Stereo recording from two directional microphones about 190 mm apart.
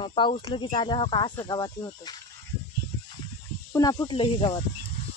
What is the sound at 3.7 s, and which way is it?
Speech, 20° left (ahead or behind).